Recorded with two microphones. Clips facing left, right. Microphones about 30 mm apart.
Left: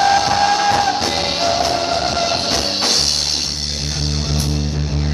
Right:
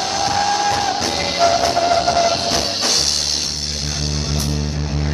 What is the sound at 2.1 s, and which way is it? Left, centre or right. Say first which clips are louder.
Train: right 2 dB; centre.